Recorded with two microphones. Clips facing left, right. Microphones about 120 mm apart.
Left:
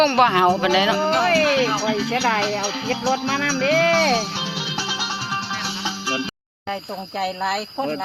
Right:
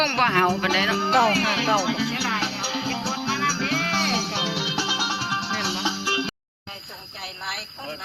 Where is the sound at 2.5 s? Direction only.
80° left.